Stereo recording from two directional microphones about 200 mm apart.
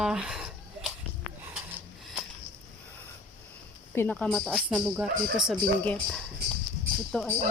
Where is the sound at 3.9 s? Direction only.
10° left (ahead or behind).